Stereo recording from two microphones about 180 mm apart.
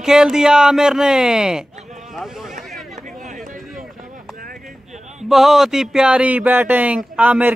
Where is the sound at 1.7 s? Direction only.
40° right (ahead or behind).